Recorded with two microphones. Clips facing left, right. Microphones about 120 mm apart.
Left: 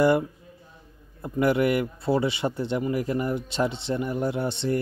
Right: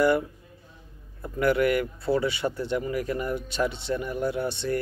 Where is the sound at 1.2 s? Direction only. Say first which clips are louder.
Left 1 dB; 20° left (ahead or behind).